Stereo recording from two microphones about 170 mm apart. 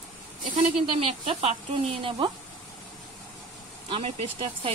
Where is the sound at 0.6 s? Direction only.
35° right (ahead or behind).